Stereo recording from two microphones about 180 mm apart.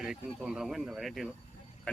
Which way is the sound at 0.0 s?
5° right (ahead or behind).